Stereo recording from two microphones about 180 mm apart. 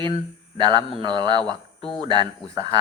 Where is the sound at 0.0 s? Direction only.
25° right (ahead or behind).